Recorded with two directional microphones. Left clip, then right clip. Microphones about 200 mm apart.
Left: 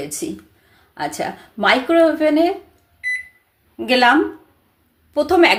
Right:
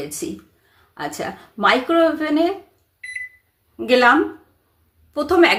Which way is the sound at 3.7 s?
5° left (ahead or behind).